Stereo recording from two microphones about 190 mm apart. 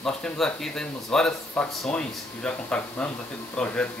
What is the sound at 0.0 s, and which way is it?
Speech, 5° left (ahead or behind).